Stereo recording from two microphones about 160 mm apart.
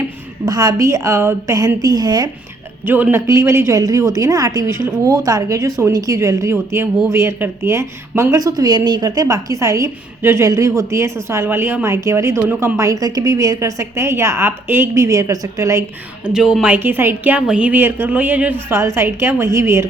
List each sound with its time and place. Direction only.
0.4 s a woman's voice: 25° right (ahead or behind)
2.8 s a woman's voice: 15° right (ahead or behind)
16.2 s a woman's voice: 5° right (ahead or behind)